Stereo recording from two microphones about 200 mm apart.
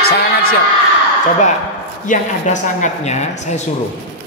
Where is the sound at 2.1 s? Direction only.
35° left (ahead or behind).